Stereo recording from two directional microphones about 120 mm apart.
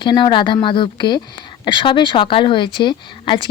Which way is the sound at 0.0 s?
40° left (ahead or behind).